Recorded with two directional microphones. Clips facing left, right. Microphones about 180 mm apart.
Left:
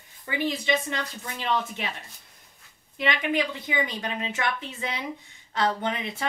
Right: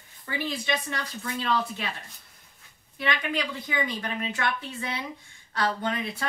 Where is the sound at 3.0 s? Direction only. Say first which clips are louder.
Left 3 dB; 20° left (ahead or behind).